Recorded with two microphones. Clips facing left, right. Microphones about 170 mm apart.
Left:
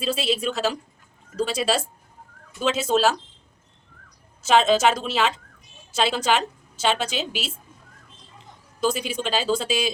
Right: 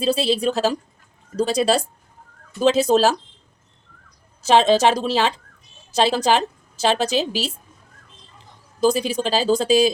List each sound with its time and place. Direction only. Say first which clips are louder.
0.0 s a woman's voice: right 5 dB; 35° right (ahead or behind)
4.4 s a woman's voice: right 3 dB; 35° right (ahead or behind)
8.8 s a woman's voice: right 6 dB; 40° right (ahead or behind)